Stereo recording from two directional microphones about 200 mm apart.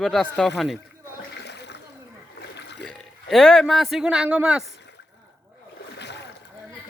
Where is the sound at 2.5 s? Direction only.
60° left (ahead or behind).